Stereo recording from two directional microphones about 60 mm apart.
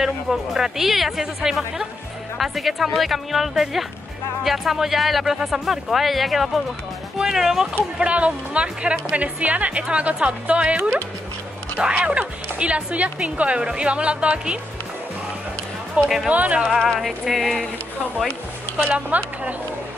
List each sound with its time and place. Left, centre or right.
0.0 s speech: centre
8.0 s speech: right
10.8 s speech: right
11.9 s speech: right
16.3 s speech: right
16.6 s speech: centre
18.8 s speech: right